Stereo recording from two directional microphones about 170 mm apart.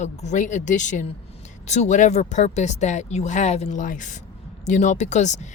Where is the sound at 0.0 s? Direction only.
45° left (ahead or behind).